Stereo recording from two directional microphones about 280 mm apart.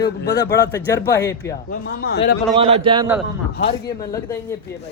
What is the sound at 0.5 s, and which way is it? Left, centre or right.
A man's voice, centre.